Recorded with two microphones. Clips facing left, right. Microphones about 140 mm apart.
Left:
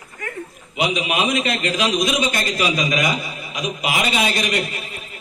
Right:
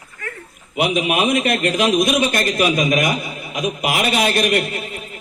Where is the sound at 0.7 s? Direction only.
55° right (ahead or behind).